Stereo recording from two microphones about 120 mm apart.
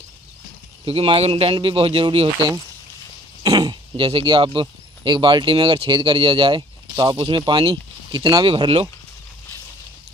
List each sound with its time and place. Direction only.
0.8 s a man's voice: 50° right (ahead or behind)
3.4 s speech: 35° right (ahead or behind)
8.5 s a man's voice: 50° right (ahead or behind)